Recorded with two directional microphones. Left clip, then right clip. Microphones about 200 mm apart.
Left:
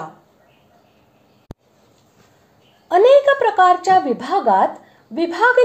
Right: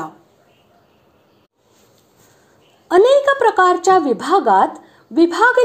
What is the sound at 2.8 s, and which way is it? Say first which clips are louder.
Speech: even; 25° right (ahead or behind).